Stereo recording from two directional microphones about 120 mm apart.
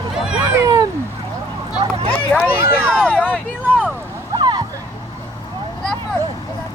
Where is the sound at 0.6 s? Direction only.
30° right (ahead or behind).